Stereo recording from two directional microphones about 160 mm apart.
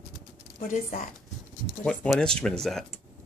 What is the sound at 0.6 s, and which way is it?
Speech, 55° left (ahead or behind).